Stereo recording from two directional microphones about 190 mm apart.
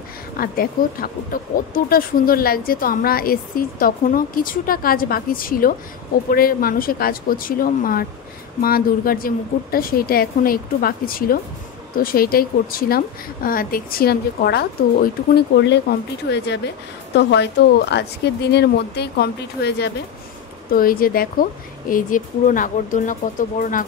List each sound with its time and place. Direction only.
0.4 s a woman's voice: 50° left (ahead or behind)